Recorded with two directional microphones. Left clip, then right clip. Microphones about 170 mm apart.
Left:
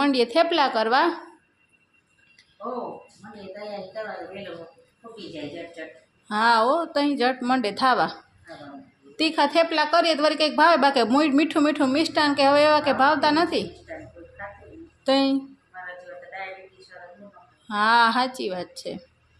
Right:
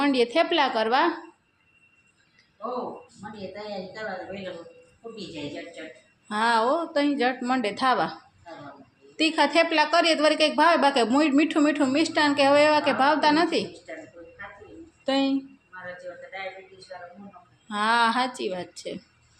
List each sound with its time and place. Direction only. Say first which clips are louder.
0.0 s a woman's voice: left 2 dB; 15° left (ahead or behind)
6.2 s a woman's voice: left 3 dB; 15° left (ahead or behind)
15.0 s speech: left 4 dB; 20° left (ahead or behind)
17.7 s a woman's voice: left 3 dB; 15° left (ahead or behind)